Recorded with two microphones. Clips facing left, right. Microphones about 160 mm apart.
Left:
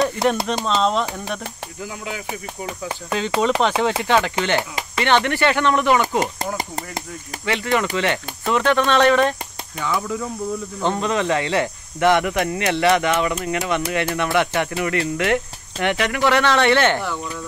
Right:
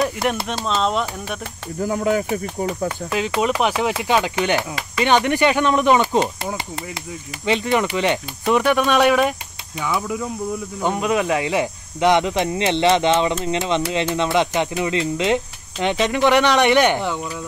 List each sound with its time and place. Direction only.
0.0 s speech: centre (ahead or behind)
1.8 s speech: 45° right (ahead or behind)
3.1 s speech: 10° right (ahead or behind)
6.4 s speech: 45° left (ahead or behind)
7.4 s speech: 20° right (ahead or behind)